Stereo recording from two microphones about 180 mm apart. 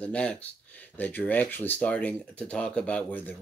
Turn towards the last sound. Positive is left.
turn(degrees=10)  # may be behind; listen again after turning